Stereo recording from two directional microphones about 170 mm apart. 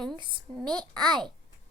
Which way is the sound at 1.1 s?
25° right (ahead or behind).